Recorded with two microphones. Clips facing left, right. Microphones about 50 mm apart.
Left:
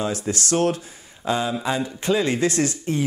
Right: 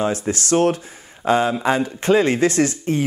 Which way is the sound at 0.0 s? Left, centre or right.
Right.